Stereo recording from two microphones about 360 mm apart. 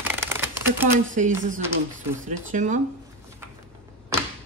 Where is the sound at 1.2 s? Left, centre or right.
Right.